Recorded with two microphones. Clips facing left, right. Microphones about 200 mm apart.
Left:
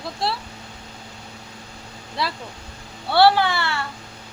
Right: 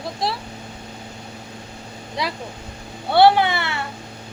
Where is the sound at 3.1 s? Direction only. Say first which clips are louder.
Right 2 dB; 20° right (ahead or behind).